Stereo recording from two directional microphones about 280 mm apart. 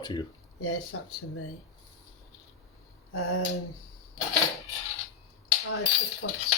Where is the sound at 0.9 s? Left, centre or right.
Left.